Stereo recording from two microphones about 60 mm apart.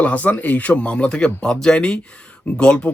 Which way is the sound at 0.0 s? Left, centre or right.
Left.